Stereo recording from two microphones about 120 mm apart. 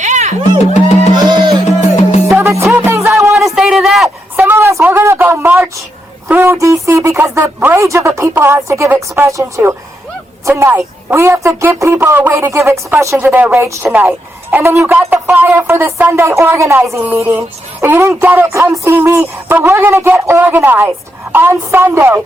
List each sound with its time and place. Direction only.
0.0 s music: 80° right
0.6 s music: 65° left (ahead or behind)
2.4 s music: 25° right (ahead or behind)
3.3 s a sound: centre (ahead or behind)
4.4 s a sound: 20° right (ahead or behind)
6.2 s a woman's voice: 20° right (ahead or behind)